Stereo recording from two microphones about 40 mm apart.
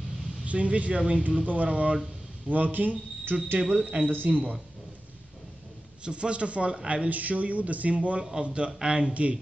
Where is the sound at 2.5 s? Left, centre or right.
Right.